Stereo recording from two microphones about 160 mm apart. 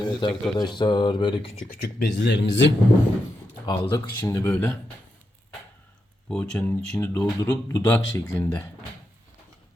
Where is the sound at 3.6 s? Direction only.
25° left (ahead or behind).